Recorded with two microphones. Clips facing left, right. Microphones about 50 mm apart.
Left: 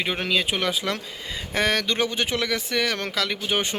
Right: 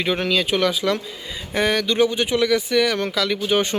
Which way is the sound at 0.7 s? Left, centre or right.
Left.